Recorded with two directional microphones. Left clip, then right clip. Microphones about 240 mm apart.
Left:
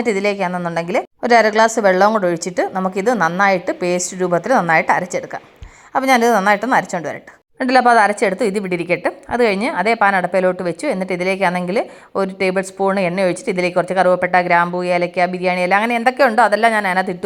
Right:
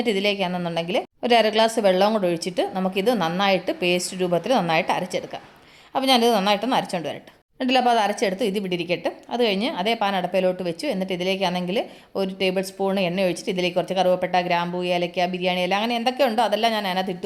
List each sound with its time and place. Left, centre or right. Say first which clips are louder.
0.0 s a woman's voice: left 5 dB; centre
4.5 s a woman's voice: left 9 dB; centre
5.9 s a woman's voice: left 5 dB; centre